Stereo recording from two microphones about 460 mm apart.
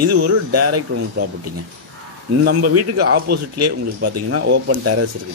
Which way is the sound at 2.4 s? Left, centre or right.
Centre.